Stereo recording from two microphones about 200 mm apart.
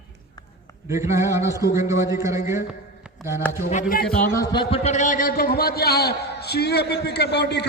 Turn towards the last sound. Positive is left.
turn(degrees=55)  # may be behind; listen again after turning